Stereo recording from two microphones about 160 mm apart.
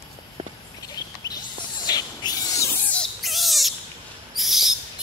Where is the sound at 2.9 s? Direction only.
5° left (ahead or behind).